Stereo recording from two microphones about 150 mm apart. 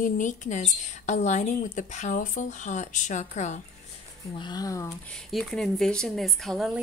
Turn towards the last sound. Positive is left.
turn(degrees=0)  # may be behind; listen again after turning